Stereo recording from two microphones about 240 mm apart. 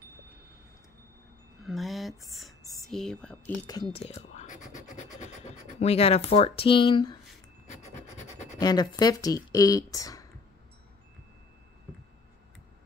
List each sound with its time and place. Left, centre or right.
1.6 s a sound: centre
3.9 s scratch: left
8.5 s speech: centre